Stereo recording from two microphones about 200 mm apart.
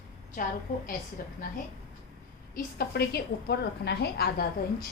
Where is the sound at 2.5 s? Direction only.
50° left (ahead or behind).